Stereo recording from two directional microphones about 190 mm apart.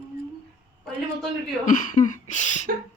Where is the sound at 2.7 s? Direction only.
55° right (ahead or behind).